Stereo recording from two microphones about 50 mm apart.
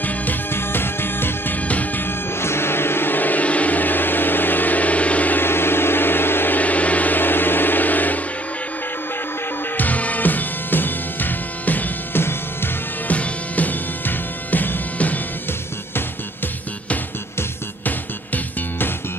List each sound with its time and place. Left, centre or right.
0.0 s music: left
0.5 s music: left
1.7 s music: left
2.0 s music: left
5.4 s music: left
6.6 s music: left
9.8 s music: left
17.8 s music: left